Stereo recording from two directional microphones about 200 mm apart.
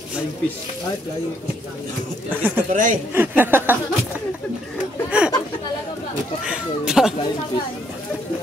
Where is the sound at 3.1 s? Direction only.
10° right (ahead or behind).